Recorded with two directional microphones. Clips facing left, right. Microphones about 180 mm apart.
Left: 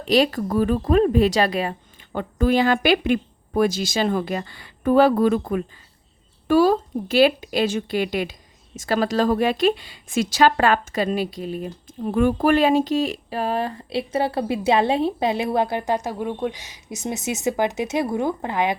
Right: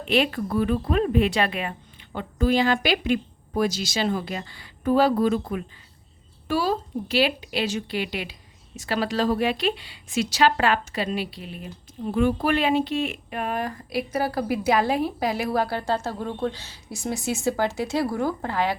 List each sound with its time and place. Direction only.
0.0 s speech: 40° left (ahead or behind); by 18.8 s 20° left (ahead or behind)